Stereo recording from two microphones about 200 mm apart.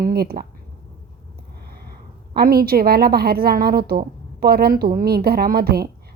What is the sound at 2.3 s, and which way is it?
A woman's voice, 50° right (ahead or behind).